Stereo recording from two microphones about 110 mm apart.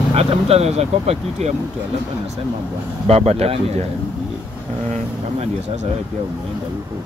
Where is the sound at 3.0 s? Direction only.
70° right (ahead or behind).